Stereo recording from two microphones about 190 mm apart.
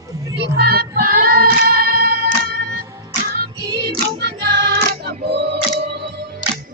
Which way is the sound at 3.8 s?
60° right (ahead or behind).